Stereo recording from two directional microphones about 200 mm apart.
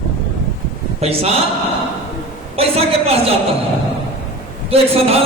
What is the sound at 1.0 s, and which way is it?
Speech, 30° right (ahead or behind).